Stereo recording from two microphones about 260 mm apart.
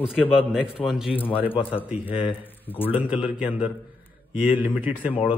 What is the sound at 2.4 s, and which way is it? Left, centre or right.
Speech, centre.